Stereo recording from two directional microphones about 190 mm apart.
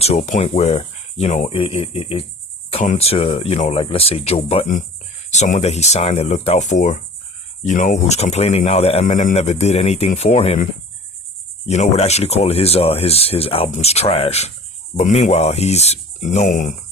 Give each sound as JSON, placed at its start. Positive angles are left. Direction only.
{"t": 0.0, "sound": "speech", "side_deg": 35}
{"t": 11.6, "sound": "speech", "side_deg": 35}